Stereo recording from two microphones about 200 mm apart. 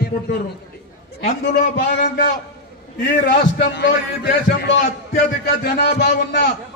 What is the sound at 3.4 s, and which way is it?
A man's voice, 60° left (ahead or behind).